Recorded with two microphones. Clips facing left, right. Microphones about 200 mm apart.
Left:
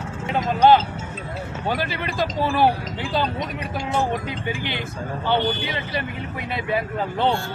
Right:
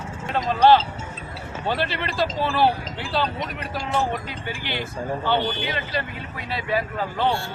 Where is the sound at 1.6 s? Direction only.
10° left (ahead or behind).